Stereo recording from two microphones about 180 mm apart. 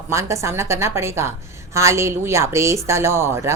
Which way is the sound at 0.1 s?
15° right (ahead or behind).